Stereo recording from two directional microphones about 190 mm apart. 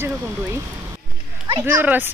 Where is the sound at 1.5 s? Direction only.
10° right (ahead or behind).